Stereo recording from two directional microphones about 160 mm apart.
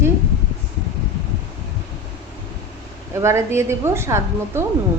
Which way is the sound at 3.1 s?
15° right (ahead or behind).